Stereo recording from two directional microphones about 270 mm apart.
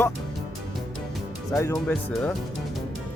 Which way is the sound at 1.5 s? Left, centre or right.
Centre.